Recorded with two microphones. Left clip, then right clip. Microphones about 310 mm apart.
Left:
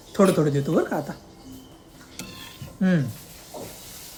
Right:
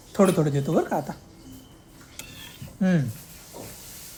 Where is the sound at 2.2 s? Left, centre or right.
Centre.